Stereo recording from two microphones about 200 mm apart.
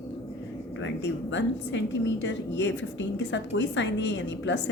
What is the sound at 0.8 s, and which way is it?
A woman's voice, 65° left (ahead or behind).